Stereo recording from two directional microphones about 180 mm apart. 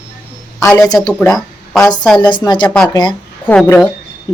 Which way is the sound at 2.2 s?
25° left (ahead or behind).